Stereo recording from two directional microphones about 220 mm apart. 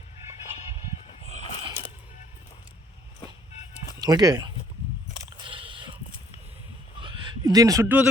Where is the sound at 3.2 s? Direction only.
30° left (ahead or behind).